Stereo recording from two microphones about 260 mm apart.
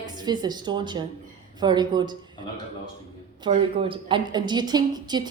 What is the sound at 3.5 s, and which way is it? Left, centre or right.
A woman's voice, right.